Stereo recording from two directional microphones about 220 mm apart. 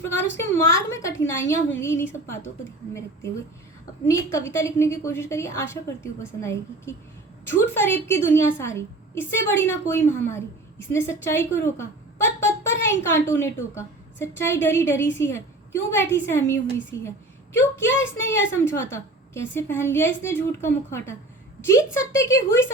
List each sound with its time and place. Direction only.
0.5 s a woman's voice: 15° left (ahead or behind)
4.0 s a woman's voice: 15° left (ahead or behind)